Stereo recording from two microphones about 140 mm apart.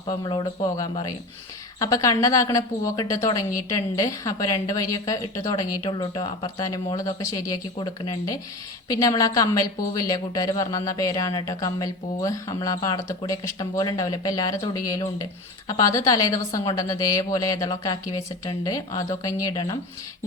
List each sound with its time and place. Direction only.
0.1 s speech: 30° left (ahead or behind)